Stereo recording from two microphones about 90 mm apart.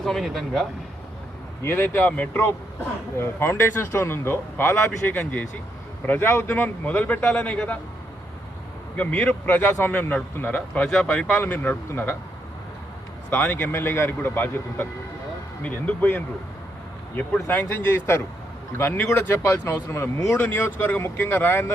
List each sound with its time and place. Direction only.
0.0 s speech: 5° left (ahead or behind)
1.6 s a man's voice: 25° left (ahead or behind)
9.0 s a man's voice: 15° left (ahead or behind)
13.3 s a man's voice: 25° left (ahead or behind)
17.5 s speech: 20° left (ahead or behind)
20.4 s speech: 20° left (ahead or behind)